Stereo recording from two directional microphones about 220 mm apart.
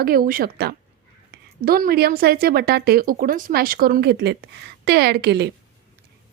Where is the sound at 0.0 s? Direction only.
40° right (ahead or behind).